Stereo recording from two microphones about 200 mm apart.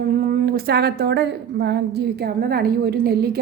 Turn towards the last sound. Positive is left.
turn(degrees=-50)  # may be behind; listen again after turning